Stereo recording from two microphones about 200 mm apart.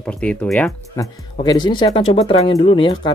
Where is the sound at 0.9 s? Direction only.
15° left (ahead or behind).